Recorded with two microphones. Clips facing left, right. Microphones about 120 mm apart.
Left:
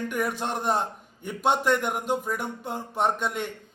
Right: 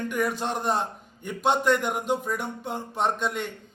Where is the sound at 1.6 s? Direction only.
Centre (ahead or behind).